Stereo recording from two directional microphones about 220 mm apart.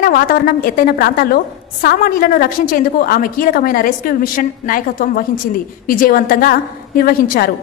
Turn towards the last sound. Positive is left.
turn(degrees=40)  # may be behind; listen again after turning